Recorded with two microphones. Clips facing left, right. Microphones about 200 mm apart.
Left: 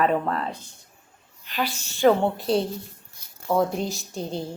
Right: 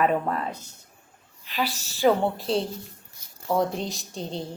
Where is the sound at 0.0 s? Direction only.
10° right (ahead or behind).